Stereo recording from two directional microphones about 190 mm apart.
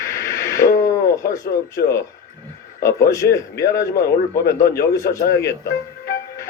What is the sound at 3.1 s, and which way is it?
A man's voice, 15° left (ahead or behind).